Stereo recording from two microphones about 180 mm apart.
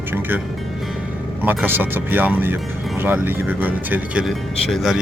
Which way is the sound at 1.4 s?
10° right (ahead or behind).